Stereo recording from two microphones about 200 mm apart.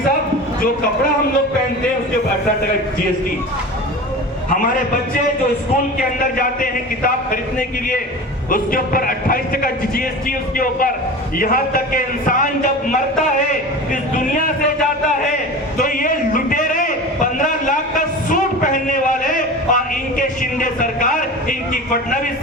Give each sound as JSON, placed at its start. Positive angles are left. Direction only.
{"t": 6.0, "sound": "speech", "side_deg": 45}
{"t": 8.4, "sound": "speech", "side_deg": 45}
{"t": 15.8, "sound": "a sound", "side_deg": 40}